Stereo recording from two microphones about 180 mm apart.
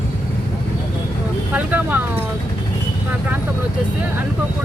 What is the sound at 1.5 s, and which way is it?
Speech, 10° right (ahead or behind).